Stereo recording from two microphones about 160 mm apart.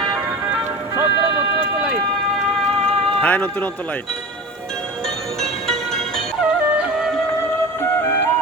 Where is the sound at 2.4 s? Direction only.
5° left (ahead or behind).